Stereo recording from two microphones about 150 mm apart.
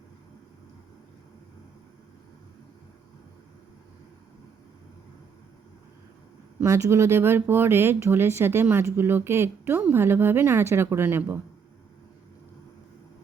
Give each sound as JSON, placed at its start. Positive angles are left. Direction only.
{"t": 6.6, "sound": "a woman's voice", "side_deg": -20}